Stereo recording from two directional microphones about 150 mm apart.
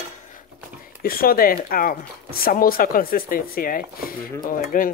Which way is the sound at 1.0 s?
75° left (ahead or behind).